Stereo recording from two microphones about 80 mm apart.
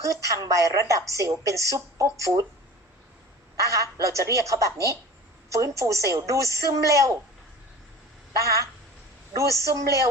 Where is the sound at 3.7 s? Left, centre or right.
Right.